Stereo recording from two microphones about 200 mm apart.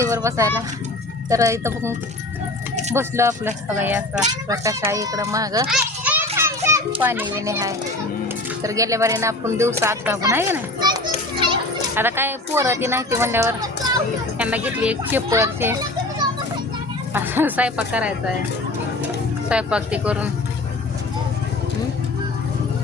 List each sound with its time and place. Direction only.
0.0 s speech: 15° right (ahead or behind)
5.6 s children playing: 5° right (ahead or behind)
7.3 s speech: 15° right (ahead or behind)
14.3 s a child's voice: 5° right (ahead or behind)
19.5 s speech: 5° right (ahead or behind)